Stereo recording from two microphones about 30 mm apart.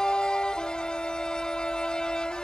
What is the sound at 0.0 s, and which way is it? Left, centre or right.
Music, left.